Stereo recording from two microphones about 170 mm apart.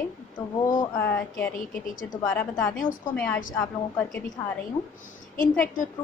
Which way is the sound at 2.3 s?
10° left (ahead or behind).